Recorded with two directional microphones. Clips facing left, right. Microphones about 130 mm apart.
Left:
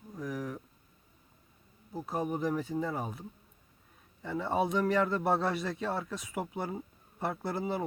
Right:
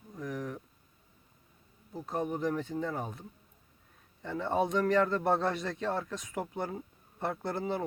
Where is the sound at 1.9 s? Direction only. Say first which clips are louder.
Even; 5° left (ahead or behind).